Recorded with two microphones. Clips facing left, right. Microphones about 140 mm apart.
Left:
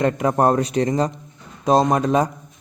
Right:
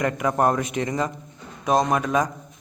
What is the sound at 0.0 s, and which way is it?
A man's voice, 30° left (ahead or behind).